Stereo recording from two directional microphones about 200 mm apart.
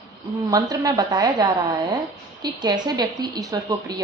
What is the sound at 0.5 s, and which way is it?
A woman's voice, 20° right (ahead or behind).